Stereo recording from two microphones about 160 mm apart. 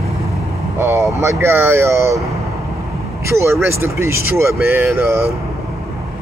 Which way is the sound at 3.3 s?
15° right (ahead or behind).